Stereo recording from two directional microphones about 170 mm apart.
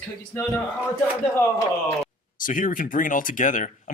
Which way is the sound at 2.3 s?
50° left (ahead or behind).